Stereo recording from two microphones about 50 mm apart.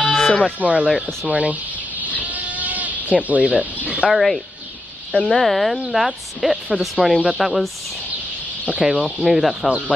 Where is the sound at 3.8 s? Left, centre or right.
Right.